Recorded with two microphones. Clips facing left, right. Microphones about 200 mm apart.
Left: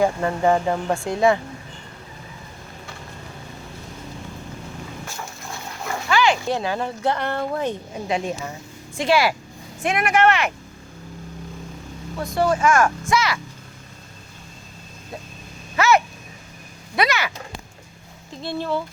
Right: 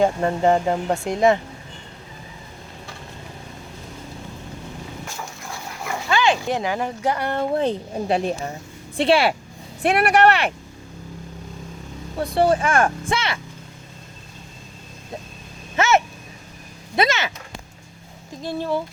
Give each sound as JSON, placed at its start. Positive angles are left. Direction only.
{"t": 0.0, "sound": "speech", "side_deg": -25}
{"t": 6.1, "sound": "a child's voice", "side_deg": -20}
{"t": 7.5, "sound": "speech", "side_deg": -30}
{"t": 12.1, "sound": "speech", "side_deg": -30}
{"t": 15.7, "sound": "vehicle", "side_deg": -25}
{"t": 16.9, "sound": "speech", "side_deg": -25}
{"t": 18.4, "sound": "speech", "side_deg": -15}